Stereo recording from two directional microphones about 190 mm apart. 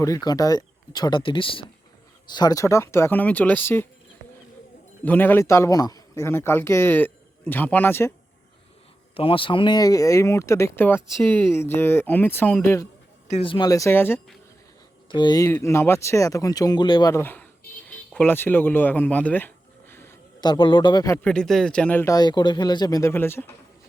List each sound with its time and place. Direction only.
0.0 s a man's voice: 20° left (ahead or behind)
5.0 s a man's voice: 10° left (ahead or behind)
9.1 s a man's voice: 30° left (ahead or behind)
13.3 s a man's voice: 25° left (ahead or behind); by 14.3 s 10° left (ahead or behind)
15.1 s a man's voice: 20° left (ahead or behind)
21.2 s a man's voice: 5° left (ahead or behind)